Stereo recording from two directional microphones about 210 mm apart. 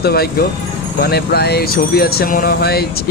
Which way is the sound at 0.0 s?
50° left (ahead or behind).